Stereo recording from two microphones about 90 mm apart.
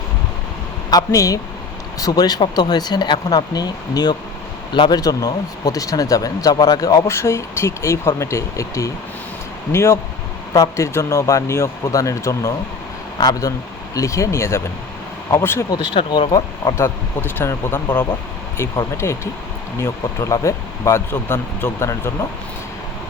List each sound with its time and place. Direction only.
0.9 s speech: 40° left (ahead or behind)
7.1 s speech: 30° left (ahead or behind)
13.1 s speech: 50° left (ahead or behind)
13.9 s speech: 35° left (ahead or behind)
15.9 s speech: 70° left (ahead or behind)
16.7 s speech: 25° left (ahead or behind)